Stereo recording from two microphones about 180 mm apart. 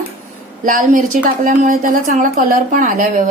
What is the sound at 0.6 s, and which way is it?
A woman's voice, 50° right (ahead or behind).